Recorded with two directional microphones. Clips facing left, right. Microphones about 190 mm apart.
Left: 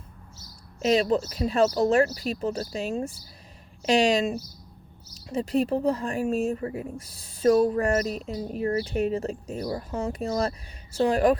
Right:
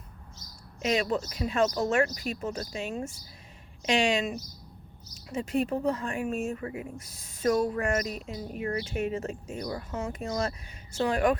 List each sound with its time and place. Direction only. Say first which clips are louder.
0.8 s speech: left 5 dB; 35° left (ahead or behind)